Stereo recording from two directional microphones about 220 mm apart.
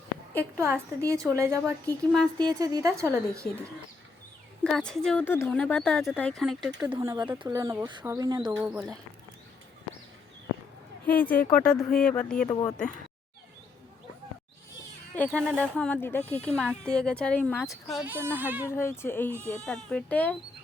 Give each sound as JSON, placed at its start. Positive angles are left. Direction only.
{"t": 0.3, "sound": "speech", "side_deg": -10}
{"t": 4.6, "sound": "speech", "side_deg": 5}
{"t": 6.9, "sound": "speech", "side_deg": -15}
{"t": 8.5, "sound": "speech", "side_deg": -5}
{"t": 11.0, "sound": "a woman's voice", "side_deg": 10}
{"t": 12.5, "sound": "speech", "side_deg": 15}
{"t": 15.1, "sound": "speech", "side_deg": 5}
{"t": 18.7, "sound": "speech", "side_deg": 10}
{"t": 19.3, "sound": "speech", "side_deg": -10}
{"t": 19.5, "sound": "speech", "side_deg": 5}